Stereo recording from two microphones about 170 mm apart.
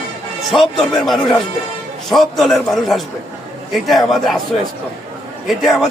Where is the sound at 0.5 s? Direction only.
Centre (ahead or behind).